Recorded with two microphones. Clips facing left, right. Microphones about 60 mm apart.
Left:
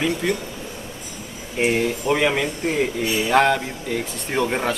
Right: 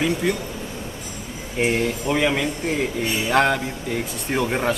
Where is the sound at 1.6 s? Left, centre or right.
Centre.